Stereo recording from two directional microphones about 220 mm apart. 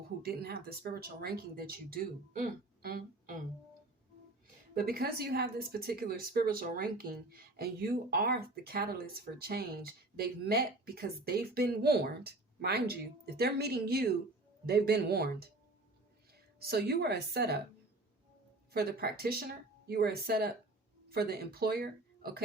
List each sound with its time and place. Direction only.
0.2 s speech: 45° right (ahead or behind)
4.8 s speech: 45° right (ahead or behind)
16.6 s speech: 45° right (ahead or behind)
18.7 s speech: 45° right (ahead or behind)